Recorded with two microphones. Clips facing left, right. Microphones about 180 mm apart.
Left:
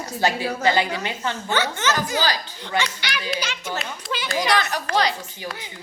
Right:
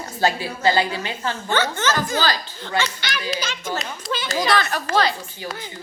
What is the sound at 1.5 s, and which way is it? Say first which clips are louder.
A child's voice: right 2 dB; 10° left (ahead or behind).